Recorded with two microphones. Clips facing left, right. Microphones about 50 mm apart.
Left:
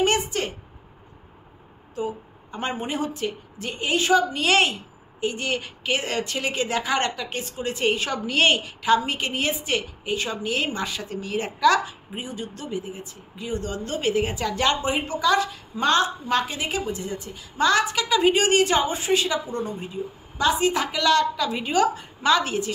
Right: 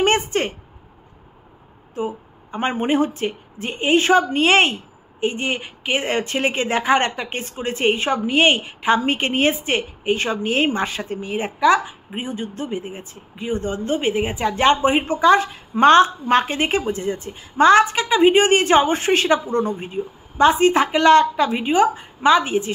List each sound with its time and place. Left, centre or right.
0.0 s a sound: right
2.0 s speech: right
12.2 s speech: right